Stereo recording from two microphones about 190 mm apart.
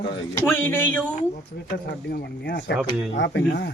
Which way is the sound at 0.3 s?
10° left (ahead or behind).